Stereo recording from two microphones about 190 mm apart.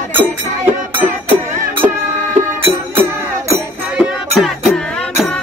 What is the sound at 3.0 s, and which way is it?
Music, 15° right (ahead or behind).